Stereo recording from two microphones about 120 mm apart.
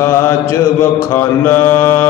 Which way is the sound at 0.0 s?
25° left (ahead or behind).